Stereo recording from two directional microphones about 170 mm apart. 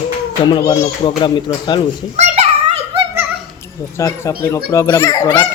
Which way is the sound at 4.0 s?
15° left (ahead or behind).